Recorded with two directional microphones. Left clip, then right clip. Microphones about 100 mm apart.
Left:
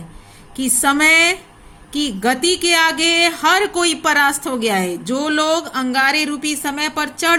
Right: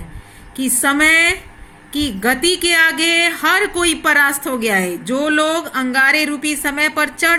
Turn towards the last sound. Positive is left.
turn(degrees=25)  # may be behind; listen again after turning